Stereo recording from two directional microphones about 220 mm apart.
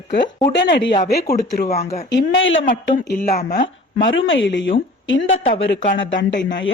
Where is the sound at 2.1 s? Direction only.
60° left (ahead or behind).